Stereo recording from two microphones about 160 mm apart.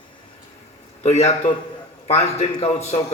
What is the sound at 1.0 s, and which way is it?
A man's voice, 45° left (ahead or behind).